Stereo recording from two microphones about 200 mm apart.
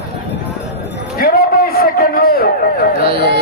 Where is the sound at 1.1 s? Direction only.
50° left (ahead or behind).